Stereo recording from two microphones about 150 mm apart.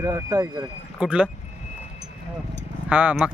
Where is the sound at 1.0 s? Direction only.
10° right (ahead or behind).